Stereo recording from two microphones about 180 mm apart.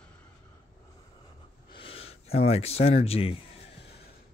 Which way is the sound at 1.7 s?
30° left (ahead or behind).